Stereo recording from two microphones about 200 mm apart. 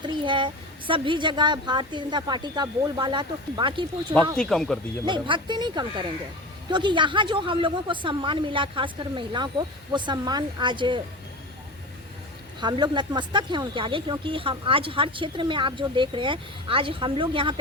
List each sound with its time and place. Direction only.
0.0 s speech: 25° right (ahead or behind)
4.4 s speech: 5° left (ahead or behind)
5.0 s speech: 25° right (ahead or behind)
12.5 s speech: 20° right (ahead or behind)